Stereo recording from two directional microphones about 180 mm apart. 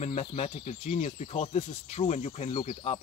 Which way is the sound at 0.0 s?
40° left (ahead or behind).